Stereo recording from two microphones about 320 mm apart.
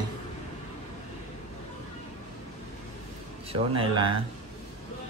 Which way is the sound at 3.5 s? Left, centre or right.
Centre.